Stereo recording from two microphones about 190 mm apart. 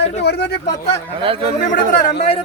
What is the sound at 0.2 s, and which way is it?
Speech, 60° left (ahead or behind).